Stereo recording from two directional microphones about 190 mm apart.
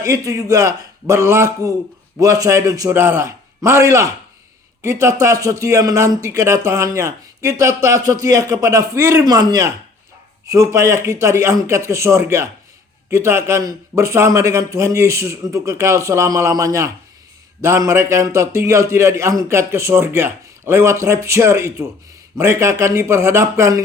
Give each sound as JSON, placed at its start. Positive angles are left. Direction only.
{"t": 0.0, "sound": "a man's voice", "side_deg": -15}